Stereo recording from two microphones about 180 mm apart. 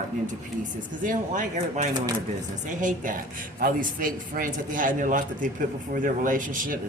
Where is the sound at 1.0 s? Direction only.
45° right (ahead or behind).